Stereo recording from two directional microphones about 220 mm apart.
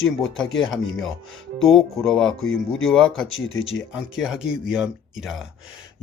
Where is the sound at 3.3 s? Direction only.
60° left (ahead or behind).